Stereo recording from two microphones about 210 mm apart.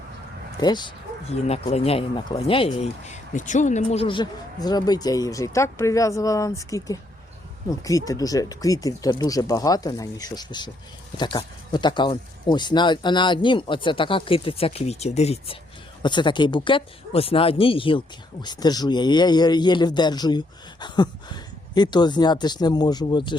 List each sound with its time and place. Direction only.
0.6 s speech: 20° left (ahead or behind)